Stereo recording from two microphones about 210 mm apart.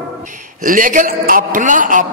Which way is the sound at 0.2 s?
35° right (ahead or behind).